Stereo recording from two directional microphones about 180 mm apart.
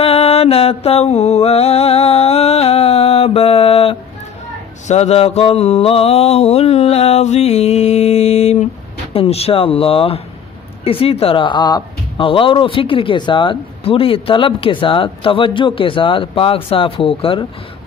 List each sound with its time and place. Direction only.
0.0 s mantra: 35° left (ahead or behind)
10.8 s speech: 35° left (ahead or behind)